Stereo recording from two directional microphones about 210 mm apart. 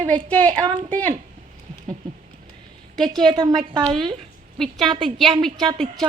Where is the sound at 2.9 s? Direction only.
Centre (ahead or behind).